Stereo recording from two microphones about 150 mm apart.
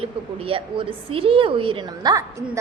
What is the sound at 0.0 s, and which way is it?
A woman's voice, 40° right (ahead or behind).